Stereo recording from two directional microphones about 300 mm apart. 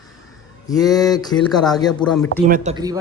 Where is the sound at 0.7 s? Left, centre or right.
Centre.